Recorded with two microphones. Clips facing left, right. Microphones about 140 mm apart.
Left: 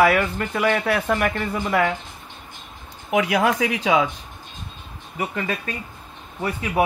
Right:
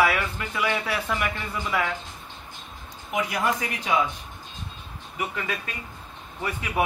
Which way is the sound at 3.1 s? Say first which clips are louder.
Left 6 dB; 90° left.